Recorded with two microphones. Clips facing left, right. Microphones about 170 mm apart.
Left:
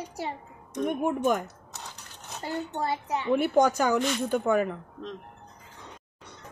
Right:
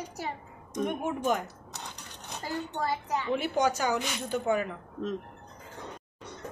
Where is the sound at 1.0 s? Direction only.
50° left (ahead or behind).